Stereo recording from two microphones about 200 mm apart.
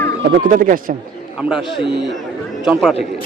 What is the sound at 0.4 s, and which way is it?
Speech, 45° right (ahead or behind).